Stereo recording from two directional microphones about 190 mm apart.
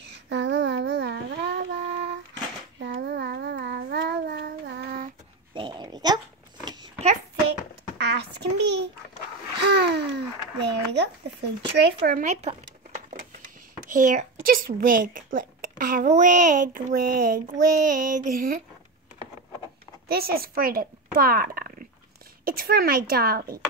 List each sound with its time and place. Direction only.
0.3 s music: 70° right (ahead or behind)
2.8 s child singing: 60° right (ahead or behind)
5.5 s a sound: 25° right (ahead or behind)
8.0 s a sound: 60° right (ahead or behind)
11.8 s speech: 50° right (ahead or behind); by 12.5 s 35° right (ahead or behind)
13.8 s speech: 45° right (ahead or behind)
20.1 s speech: 55° right (ahead or behind)